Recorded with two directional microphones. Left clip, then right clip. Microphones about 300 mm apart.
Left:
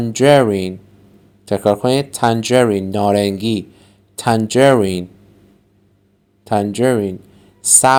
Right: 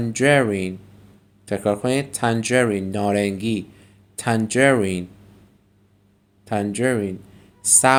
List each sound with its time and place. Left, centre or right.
0.0 s speech: centre
6.4 s speech: left